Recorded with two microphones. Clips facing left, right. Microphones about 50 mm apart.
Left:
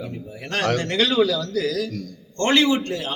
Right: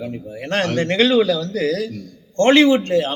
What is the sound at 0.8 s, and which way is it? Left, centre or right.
A man's voice, right.